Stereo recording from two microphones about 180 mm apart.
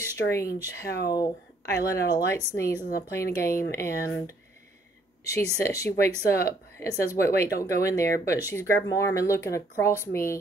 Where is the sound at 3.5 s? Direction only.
15° left (ahead or behind).